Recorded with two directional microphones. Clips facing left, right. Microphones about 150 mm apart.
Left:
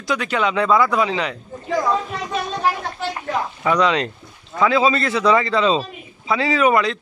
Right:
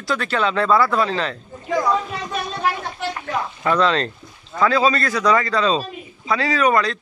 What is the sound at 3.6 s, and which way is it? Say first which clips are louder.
Speech: even; 15° left (ahead or behind).